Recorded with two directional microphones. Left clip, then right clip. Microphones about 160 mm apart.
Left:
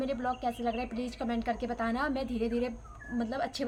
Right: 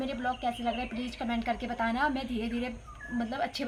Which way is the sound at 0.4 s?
35° left (ahead or behind).